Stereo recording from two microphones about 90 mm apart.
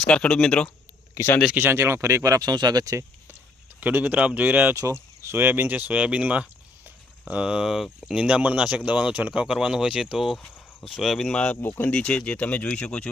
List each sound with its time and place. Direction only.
0.0 s speech: 10° left (ahead or behind)
1.1 s speech: 25° left (ahead or behind)
1.5 s speech: 25° right (ahead or behind); by 3.0 s 45° right (ahead or behind)
3.8 s speech: 20° right (ahead or behind)
4.7 s speech: 35° right (ahead or behind); by 13.1 s 10° left (ahead or behind)